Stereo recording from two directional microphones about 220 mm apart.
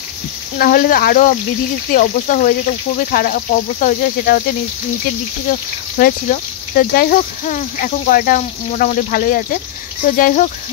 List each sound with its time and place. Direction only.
0.6 s speech: 40° left (ahead or behind)
5.5 s speech: 40° left (ahead or behind)